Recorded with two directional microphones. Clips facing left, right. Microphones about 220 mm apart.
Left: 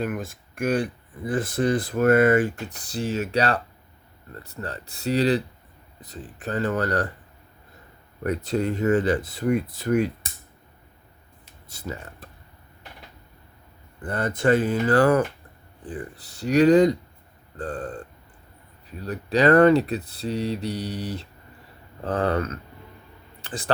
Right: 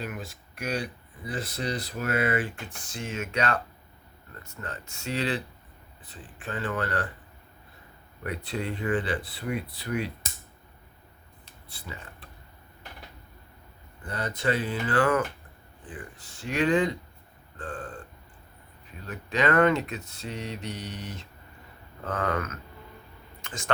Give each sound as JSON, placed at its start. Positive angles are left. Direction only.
{"t": 0.0, "sound": "speech", "side_deg": 50}
{"t": 8.2, "sound": "speech", "side_deg": 45}
{"t": 11.7, "sound": "speech", "side_deg": 45}
{"t": 14.0, "sound": "speech", "side_deg": 50}
{"t": 19.0, "sound": "speech", "side_deg": 35}
{"t": 23.4, "sound": "a sound", "side_deg": 35}